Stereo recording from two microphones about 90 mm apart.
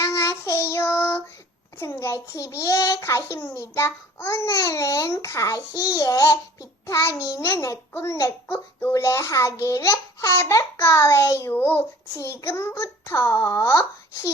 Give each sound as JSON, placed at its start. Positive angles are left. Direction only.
{"t": 0.1, "sound": "child singing", "side_deg": 35}
{"t": 1.8, "sound": "a child's voice", "side_deg": 30}
{"t": 4.4, "sound": "a child's voice", "side_deg": 45}